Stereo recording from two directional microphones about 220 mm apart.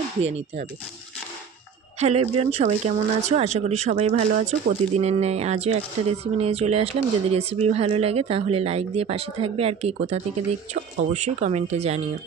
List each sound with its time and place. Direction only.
2.0 s speech: 30° right (ahead or behind)